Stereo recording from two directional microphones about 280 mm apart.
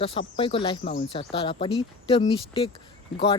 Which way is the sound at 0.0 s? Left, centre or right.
Centre.